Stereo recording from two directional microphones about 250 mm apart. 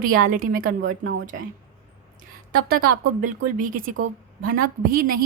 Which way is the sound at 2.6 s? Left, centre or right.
Right.